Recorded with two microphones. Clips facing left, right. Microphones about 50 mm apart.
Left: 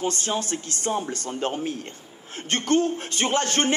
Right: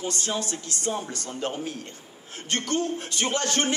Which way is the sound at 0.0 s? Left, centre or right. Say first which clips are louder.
Left 3 dB; left.